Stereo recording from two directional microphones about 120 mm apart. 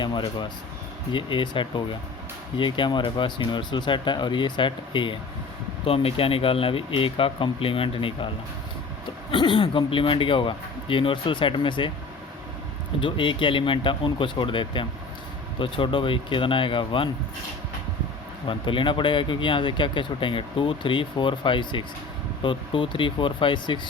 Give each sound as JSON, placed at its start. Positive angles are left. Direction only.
{"t": 0.0, "sound": "speech", "side_deg": 40}
{"t": 5.8, "sound": "speech", "side_deg": 50}
{"t": 9.3, "sound": "speech", "side_deg": 40}
{"t": 13.0, "sound": "speech", "side_deg": 45}
{"t": 18.4, "sound": "speech", "side_deg": 45}